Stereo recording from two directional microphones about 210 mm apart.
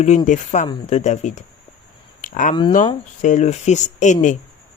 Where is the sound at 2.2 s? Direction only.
35° left (ahead or behind).